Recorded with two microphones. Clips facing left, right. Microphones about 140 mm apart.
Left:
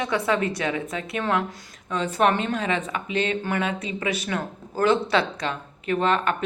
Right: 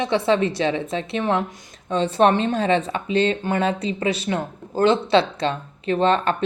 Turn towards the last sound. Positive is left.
turn(degrees=-30)  # may be behind; listen again after turning